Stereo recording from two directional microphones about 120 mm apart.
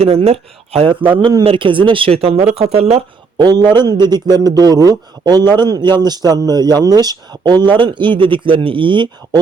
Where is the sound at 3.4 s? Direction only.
35° right (ahead or behind).